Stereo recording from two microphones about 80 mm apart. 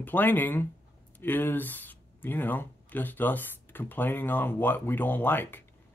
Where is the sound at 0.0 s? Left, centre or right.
Left.